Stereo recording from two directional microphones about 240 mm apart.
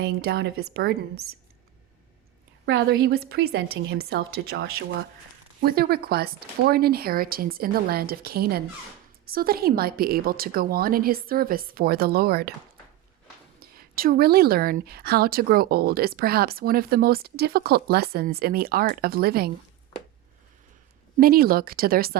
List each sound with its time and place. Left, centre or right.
0.0 s a woman's voice: right
2.6 s a woman's voice: right
13.6 s a woman's voice: right
21.2 s a woman's voice: right